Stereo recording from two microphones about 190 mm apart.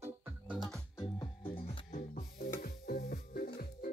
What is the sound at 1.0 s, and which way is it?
Music, 25° left (ahead or behind).